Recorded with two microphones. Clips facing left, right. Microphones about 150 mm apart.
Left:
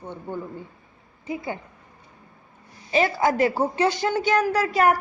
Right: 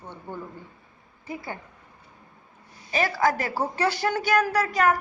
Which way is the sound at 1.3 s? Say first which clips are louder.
Left 5 dB; 20° left (ahead or behind).